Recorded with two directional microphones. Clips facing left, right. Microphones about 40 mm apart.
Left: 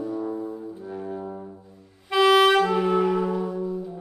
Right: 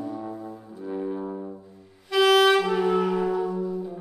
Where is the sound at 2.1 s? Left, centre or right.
Centre.